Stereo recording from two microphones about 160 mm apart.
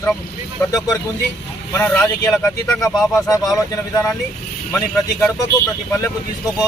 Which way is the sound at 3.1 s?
20° left (ahead or behind).